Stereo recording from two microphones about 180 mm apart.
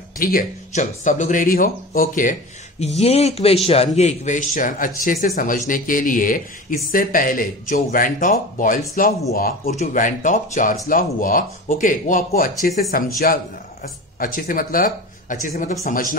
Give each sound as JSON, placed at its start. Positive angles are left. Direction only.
{"t": 0.2, "sound": "a man's voice", "side_deg": 50}
{"t": 3.0, "sound": "a man's voice", "side_deg": 35}